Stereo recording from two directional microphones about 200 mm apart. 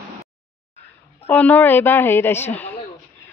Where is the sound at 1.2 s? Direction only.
10° left (ahead or behind).